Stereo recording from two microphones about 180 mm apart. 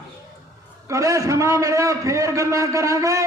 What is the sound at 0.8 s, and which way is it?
A man's voice, 15° right (ahead or behind).